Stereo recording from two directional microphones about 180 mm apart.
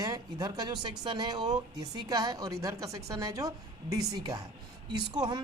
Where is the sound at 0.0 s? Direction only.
20° right (ahead or behind).